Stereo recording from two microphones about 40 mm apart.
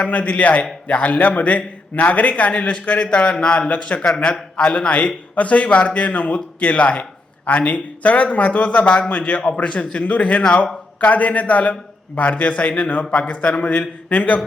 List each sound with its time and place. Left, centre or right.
0.0 s a man's voice: left
3.7 s a man's voice: left